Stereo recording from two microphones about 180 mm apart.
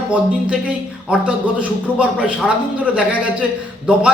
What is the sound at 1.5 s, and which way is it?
A man's voice, 5° right (ahead or behind).